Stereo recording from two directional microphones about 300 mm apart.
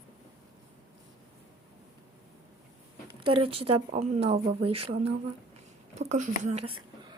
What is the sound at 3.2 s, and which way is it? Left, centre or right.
Speech, centre.